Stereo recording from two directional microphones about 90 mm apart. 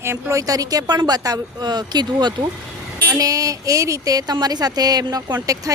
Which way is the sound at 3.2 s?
40° right (ahead or behind).